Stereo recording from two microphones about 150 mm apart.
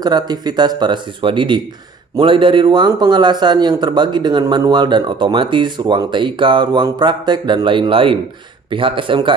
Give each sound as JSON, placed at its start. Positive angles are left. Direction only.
{"t": 0.0, "sound": "a man's voice", "side_deg": -30}